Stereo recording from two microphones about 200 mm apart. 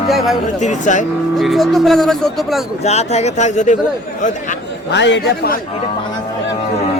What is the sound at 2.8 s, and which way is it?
Speech, 35° left (ahead or behind).